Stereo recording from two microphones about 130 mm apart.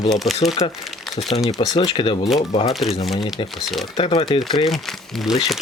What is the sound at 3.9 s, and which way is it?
Speech, 45° left (ahead or behind).